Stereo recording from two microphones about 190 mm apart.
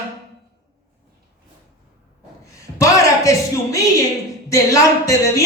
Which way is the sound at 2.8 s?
15° left (ahead or behind).